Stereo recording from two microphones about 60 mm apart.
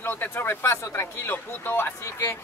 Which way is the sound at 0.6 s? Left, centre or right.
Left.